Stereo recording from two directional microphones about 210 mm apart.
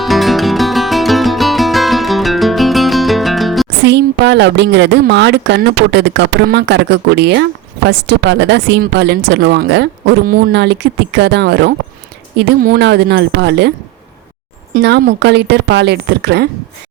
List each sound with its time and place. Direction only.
0.0 s music: centre (ahead or behind)
3.8 s speech: 55° right (ahead or behind)